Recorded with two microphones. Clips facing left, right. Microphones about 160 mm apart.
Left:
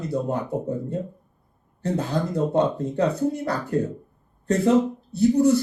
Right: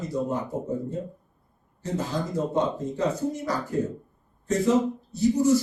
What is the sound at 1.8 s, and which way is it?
Speech, 60° left (ahead or behind).